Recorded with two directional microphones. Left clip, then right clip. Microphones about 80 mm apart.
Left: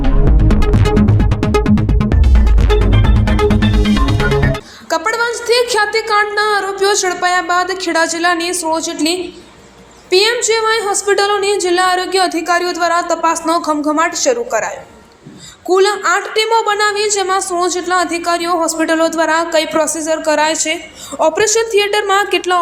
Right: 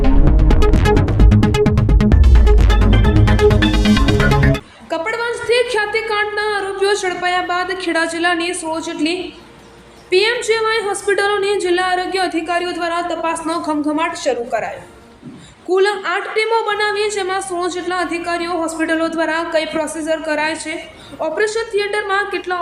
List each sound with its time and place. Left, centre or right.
0.0 s music: centre
2.0 s music: centre
4.9 s a sound: left
6.1 s a woman's voice: left
6.6 s a woman's voice: centre
8.2 s a woman's voice: centre
11.8 s a woman's voice: left
15.7 s a woman's voice: left
21.2 s a woman's voice: left